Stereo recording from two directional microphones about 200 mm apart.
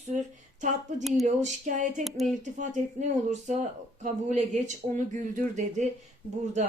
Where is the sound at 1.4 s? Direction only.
40° right (ahead or behind).